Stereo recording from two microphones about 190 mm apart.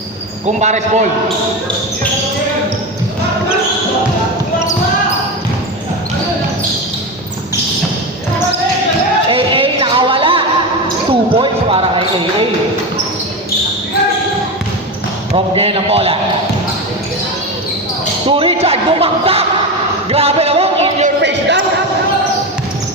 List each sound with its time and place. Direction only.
0.4 s speech: 40° right (ahead or behind)
9.3 s music: 25° right (ahead or behind)
11.1 s basketball bounce: 30° right (ahead or behind)
15.5 s speech: 30° right (ahead or behind)
18.3 s a sound: 30° right (ahead or behind)
21.2 s a sound: 65° right (ahead or behind)